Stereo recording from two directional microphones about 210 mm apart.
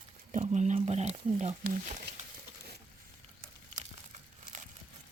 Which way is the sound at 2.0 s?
40° right (ahead or behind).